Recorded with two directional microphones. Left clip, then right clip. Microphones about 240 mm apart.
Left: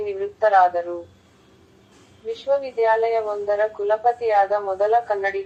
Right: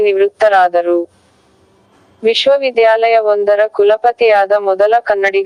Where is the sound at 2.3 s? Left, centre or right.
Right.